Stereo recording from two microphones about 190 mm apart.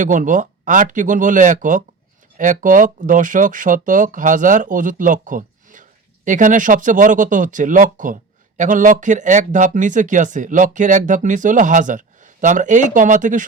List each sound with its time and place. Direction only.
0.0 s speech: 40° right (ahead or behind)